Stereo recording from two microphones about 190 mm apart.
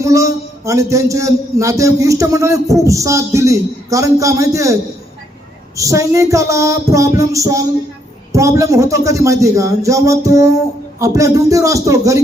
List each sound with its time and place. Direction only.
0.0 s a man's voice: 15° right (ahead or behind)